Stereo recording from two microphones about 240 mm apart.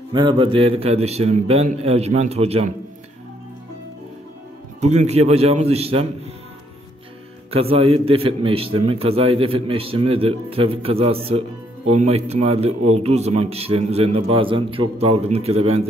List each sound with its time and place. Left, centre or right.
0.1 s a man's voice: centre
4.7 s a man's voice: right
7.5 s a man's voice: right